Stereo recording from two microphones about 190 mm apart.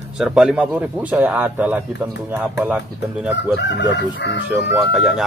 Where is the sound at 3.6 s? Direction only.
70° left (ahead or behind).